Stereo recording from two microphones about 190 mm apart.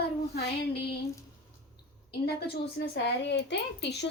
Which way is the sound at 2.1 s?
60° left (ahead or behind).